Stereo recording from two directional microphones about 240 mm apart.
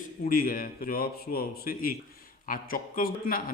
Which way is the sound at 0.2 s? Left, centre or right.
Left.